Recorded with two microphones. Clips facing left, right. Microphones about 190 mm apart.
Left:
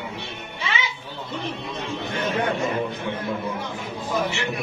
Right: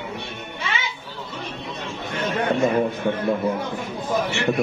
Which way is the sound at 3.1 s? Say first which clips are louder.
Right 6 dB; 50° right (ahead or behind).